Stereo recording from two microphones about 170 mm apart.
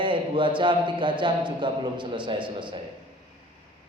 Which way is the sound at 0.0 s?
30° right (ahead or behind).